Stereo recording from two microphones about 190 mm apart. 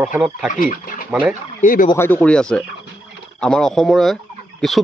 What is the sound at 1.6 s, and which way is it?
Speech, 45° left (ahead or behind).